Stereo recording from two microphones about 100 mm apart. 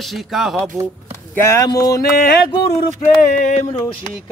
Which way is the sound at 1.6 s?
35° left (ahead or behind).